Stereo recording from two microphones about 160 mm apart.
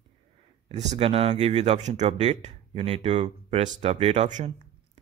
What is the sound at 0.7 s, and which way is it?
Speech, 45° right (ahead or behind).